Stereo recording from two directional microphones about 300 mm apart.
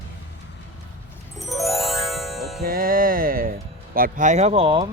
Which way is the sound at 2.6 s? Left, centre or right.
Right.